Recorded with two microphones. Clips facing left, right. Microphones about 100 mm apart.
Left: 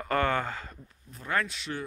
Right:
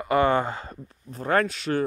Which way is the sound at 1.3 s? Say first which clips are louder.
Right 8 dB; 50° right (ahead or behind).